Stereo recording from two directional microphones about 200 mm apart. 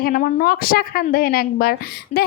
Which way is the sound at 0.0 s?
45° left (ahead or behind).